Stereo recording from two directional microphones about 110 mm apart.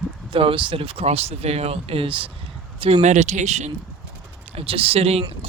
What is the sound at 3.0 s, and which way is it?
Speech, 90° right.